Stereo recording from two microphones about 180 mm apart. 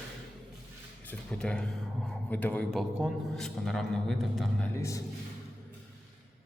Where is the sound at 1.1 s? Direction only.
5° left (ahead or behind).